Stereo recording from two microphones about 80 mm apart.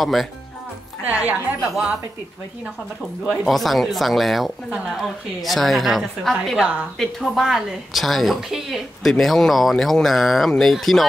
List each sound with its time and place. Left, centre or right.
0.0 s a woman's voice: centre
1.0 s a woman's voice: centre
3.4 s a woman's voice: centre
6.6 s a woman's voice: centre
7.0 s a woman's voice: centre